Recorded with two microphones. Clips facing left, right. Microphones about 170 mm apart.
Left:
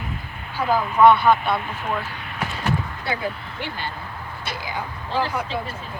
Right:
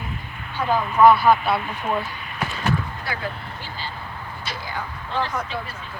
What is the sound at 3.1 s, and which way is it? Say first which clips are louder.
Speech: left 5 dB; 25° left (ahead or behind).